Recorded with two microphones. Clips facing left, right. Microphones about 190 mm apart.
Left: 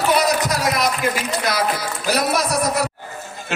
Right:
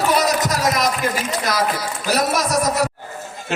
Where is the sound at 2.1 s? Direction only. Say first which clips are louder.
Right 1 dB; 45° right (ahead or behind).